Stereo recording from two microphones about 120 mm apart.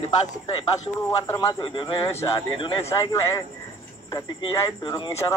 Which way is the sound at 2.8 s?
25° left (ahead or behind).